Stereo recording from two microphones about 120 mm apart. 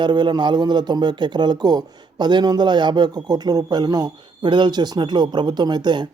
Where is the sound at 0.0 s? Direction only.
40° right (ahead or behind).